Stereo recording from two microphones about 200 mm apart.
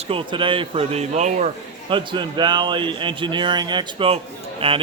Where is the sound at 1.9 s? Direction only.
25° right (ahead or behind).